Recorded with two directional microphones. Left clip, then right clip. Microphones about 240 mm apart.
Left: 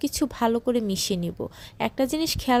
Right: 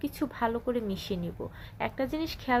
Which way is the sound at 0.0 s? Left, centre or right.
Left.